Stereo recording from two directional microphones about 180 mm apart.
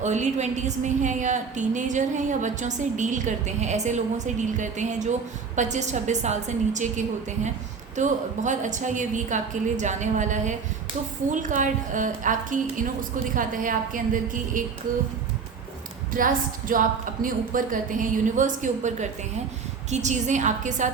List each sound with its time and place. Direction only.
0.0 s a woman's voice: 40° right (ahead or behind)
16.1 s a woman's voice: 50° right (ahead or behind)